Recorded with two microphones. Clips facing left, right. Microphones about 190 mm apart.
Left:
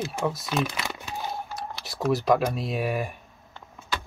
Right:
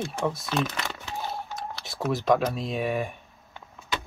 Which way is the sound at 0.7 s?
15° left (ahead or behind).